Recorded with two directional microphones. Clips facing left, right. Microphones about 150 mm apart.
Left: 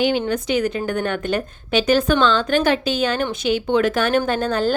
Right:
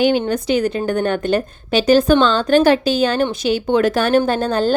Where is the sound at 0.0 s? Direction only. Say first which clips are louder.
Right 3 dB; 45° right (ahead or behind).